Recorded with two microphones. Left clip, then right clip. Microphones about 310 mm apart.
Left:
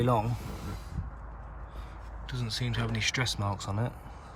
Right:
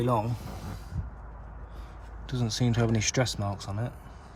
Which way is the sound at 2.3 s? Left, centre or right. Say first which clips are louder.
Right 4 dB; centre.